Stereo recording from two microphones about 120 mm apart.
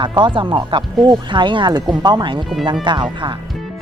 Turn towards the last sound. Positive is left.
turn(degrees=-40)  # may be behind; listen again after turning